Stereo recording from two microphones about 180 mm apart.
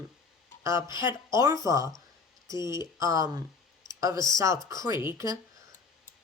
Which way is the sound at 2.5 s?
25° left (ahead or behind).